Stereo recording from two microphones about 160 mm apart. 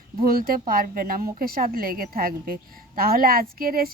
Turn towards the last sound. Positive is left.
turn(degrees=-65)  # may be behind; listen again after turning